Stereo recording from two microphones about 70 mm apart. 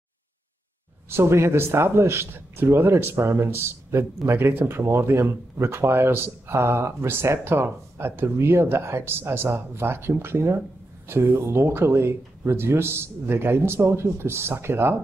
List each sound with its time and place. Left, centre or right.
1.1 s speech: right